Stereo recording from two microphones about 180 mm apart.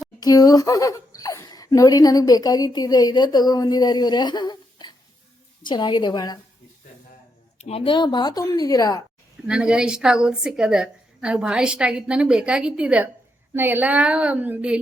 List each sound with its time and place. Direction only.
0.2 s speech: 20° left (ahead or behind)
7.6 s speech: 35° left (ahead or behind)
9.5 s a woman's voice: 5° right (ahead or behind)